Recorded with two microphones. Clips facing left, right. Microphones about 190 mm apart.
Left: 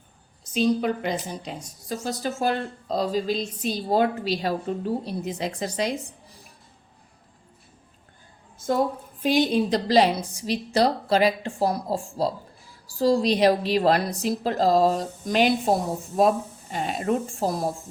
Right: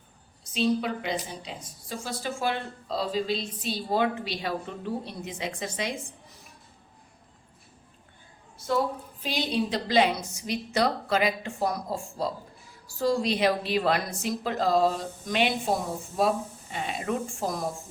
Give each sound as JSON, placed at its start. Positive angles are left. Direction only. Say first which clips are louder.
{"t": 0.5, "sound": "a woman's voice", "louder": "left 4 dB", "side_deg": 45}
{"t": 8.5, "sound": "a sound", "louder": "left 2 dB", "side_deg": 45}
{"t": 9.2, "sound": "a woman's voice", "louder": "left 7 dB", "side_deg": 50}